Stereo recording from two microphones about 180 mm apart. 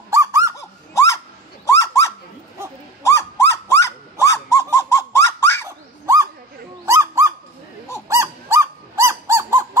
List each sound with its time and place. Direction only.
0.1 s honk: 15° right (ahead or behind)
0.6 s a sound: 15° left (ahead or behind)
3.0 s bird: 15° left (ahead or behind)
6.9 s owl: 15° right (ahead or behind)
8.1 s honk: 15° right (ahead or behind)